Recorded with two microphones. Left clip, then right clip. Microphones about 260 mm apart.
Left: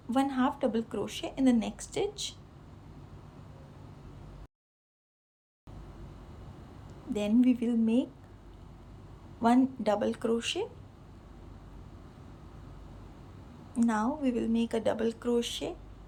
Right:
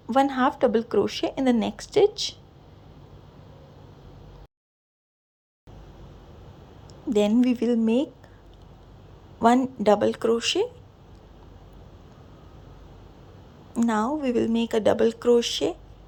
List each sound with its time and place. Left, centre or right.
0.2 s a woman's voice: centre
7.1 s speech: centre
9.4 s speech: centre
13.7 s speech: right